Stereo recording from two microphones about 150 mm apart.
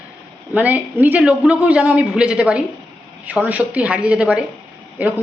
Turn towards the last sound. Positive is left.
turn(degrees=-10)  # may be behind; listen again after turning